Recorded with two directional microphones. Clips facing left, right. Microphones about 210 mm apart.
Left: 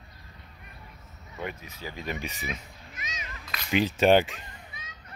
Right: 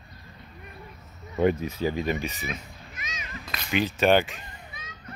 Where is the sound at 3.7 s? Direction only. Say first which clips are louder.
Left 1 dB; 30° left (ahead or behind).